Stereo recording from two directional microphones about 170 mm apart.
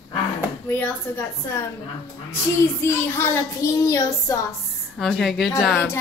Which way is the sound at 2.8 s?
15° left (ahead or behind).